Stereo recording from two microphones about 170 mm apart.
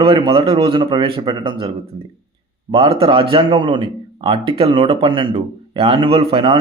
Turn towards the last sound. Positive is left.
turn(degrees=-30)  # may be behind; listen again after turning